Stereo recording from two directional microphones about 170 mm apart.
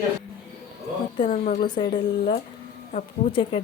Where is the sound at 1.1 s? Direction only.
45° left (ahead or behind).